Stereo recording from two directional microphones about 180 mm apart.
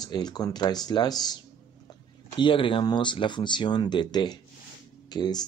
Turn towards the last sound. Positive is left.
turn(degrees=20)  # may be behind; listen again after turning